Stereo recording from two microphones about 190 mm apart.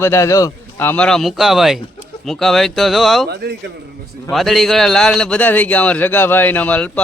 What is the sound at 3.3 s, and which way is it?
Speech, 60° right (ahead or behind).